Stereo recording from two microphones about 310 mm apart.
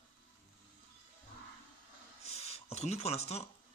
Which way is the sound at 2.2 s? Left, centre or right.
Centre.